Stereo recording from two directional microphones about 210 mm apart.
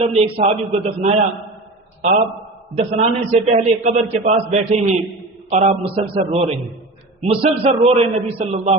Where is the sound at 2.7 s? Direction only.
35° right (ahead or behind).